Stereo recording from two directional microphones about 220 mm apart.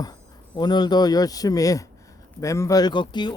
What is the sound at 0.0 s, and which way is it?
Speech, 20° left (ahead or behind).